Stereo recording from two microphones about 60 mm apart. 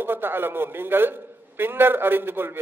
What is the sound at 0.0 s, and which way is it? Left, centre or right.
A man's voice, right.